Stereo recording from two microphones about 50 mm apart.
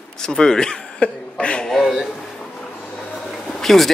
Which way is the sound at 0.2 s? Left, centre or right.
Centre.